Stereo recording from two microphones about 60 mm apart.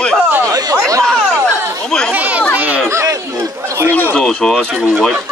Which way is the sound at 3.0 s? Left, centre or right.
Right.